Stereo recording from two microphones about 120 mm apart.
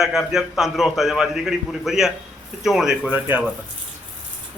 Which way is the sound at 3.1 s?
15° right (ahead or behind).